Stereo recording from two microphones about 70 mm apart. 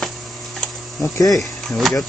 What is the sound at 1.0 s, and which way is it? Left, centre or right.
Speech, left.